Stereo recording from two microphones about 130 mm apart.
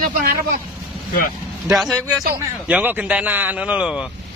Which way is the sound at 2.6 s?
10° right (ahead or behind).